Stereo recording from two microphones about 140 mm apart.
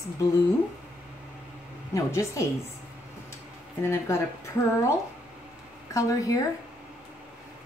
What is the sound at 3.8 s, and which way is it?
Speech, 20° left (ahead or behind).